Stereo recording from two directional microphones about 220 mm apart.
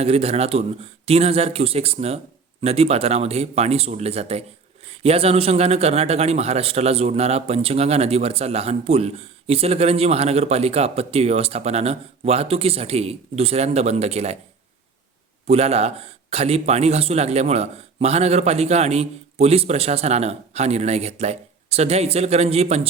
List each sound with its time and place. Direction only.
0.0 s a man's voice: 30° right (ahead or behind)
15.4 s a man's voice: 30° right (ahead or behind)